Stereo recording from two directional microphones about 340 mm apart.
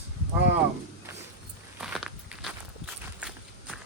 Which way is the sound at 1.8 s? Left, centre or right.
Centre.